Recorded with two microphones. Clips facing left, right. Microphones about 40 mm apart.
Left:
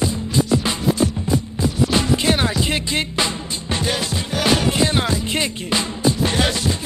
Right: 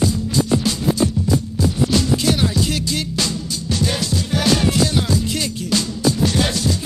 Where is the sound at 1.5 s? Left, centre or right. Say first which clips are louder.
Even; left.